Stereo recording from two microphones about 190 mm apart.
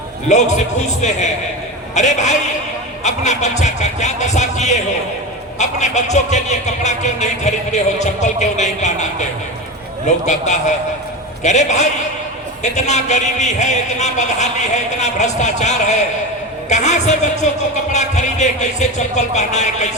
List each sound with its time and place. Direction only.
0.3 s a man's voice: 40° left (ahead or behind)
10.2 s a man's voice: 40° left (ahead or behind)